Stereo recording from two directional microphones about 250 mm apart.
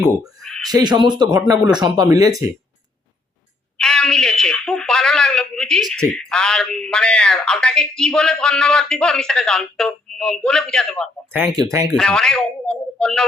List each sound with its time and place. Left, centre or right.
0.4 s owl: centre
0.7 s speech: centre
3.8 s speech: centre
11.3 s speech: centre
11.9 s speech: centre